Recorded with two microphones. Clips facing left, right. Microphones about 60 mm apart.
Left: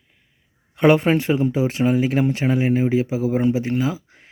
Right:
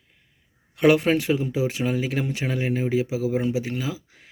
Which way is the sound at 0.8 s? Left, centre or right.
Left.